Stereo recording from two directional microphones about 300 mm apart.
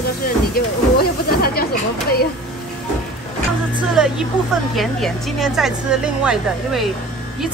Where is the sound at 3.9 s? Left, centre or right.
Centre.